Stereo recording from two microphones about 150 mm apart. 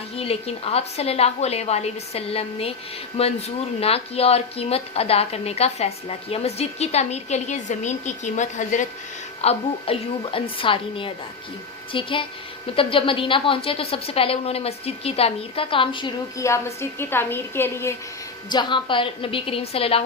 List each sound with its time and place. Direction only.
0.2 s a woman's voice: 40° left (ahead or behind)
9.4 s a woman's voice: 40° left (ahead or behind)
16.4 s a woman's voice: 20° left (ahead or behind)
18.4 s a woman's voice: 30° left (ahead or behind)